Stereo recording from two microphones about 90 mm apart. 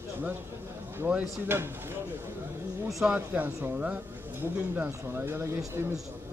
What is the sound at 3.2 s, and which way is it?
Speech, 20° right (ahead or behind).